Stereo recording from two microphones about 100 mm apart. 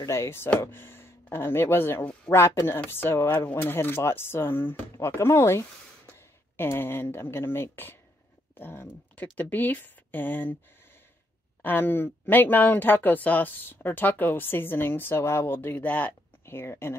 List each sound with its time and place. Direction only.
0.0 s speech: 25° left (ahead or behind)
11.6 s speech: 20° left (ahead or behind)